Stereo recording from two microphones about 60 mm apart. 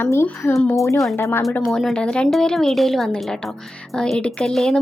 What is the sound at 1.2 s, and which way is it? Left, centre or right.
Speech, left.